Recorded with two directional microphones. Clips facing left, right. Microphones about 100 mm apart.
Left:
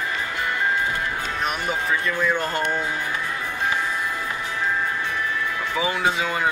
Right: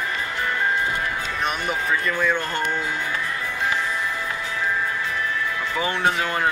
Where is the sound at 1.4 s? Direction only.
Centre (ahead or behind).